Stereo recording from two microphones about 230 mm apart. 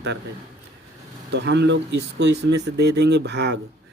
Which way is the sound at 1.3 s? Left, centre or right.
Right.